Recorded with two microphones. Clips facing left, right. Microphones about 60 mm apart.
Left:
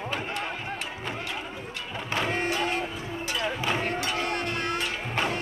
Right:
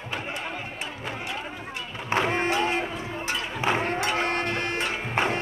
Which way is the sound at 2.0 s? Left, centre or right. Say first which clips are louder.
Right 4 dB; right.